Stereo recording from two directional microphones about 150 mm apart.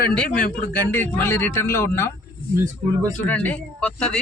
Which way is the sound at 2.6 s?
20° right (ahead or behind).